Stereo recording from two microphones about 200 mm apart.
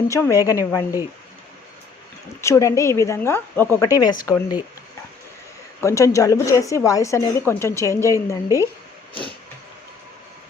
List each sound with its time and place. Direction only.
0.1 s a woman's voice: 15° left (ahead or behind)
2.4 s a woman's voice: 15° left (ahead or behind)
5.8 s a woman's voice: 15° left (ahead or behind)